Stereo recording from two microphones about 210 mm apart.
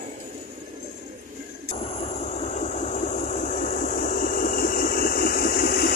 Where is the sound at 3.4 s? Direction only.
40° left (ahead or behind).